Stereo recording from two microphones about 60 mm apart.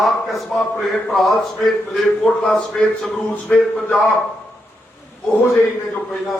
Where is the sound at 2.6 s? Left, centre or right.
Centre.